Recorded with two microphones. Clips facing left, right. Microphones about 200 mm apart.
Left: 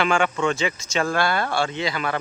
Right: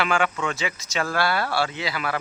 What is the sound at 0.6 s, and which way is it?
Speech, 5° right (ahead or behind).